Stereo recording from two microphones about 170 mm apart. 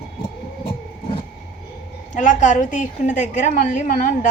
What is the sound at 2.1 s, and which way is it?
A woman's voice, 45° left (ahead or behind).